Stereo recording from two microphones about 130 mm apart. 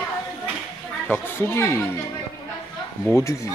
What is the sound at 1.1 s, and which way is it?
Speech, 20° left (ahead or behind).